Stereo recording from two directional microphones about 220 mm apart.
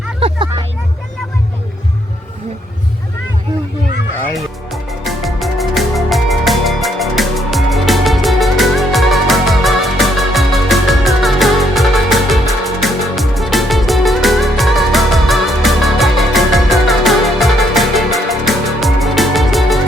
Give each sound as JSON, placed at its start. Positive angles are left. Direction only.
{"t": 0.2, "sound": "vehicle", "side_deg": -25}
{"t": 4.4, "sound": "music", "side_deg": 0}